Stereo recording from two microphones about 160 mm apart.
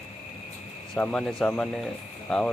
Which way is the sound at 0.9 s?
5° left (ahead or behind).